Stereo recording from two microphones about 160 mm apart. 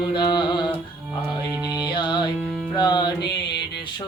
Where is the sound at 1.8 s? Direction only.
30° left (ahead or behind).